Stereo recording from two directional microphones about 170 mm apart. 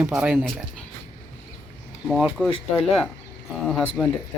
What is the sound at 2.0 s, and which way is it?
Speech, centre (ahead or behind).